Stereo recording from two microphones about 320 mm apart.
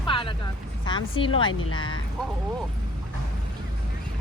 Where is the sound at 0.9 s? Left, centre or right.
Centre.